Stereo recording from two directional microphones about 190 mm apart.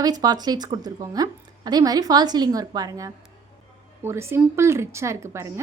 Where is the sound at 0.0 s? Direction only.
20° right (ahead or behind).